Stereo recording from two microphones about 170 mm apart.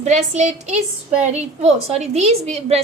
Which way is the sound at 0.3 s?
40° right (ahead or behind).